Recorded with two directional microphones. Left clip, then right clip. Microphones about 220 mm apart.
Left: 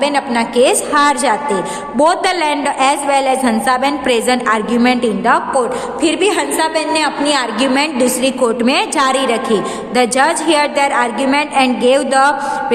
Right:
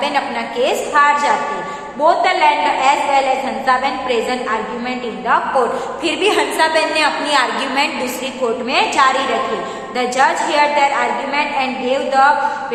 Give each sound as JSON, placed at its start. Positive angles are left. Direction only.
{"t": 0.0, "sound": "a woman's voice", "side_deg": 45}